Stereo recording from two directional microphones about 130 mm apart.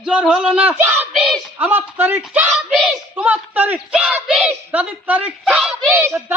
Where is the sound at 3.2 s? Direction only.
10° right (ahead or behind).